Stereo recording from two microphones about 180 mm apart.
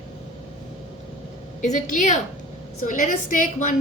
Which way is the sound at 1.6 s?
45° left (ahead or behind).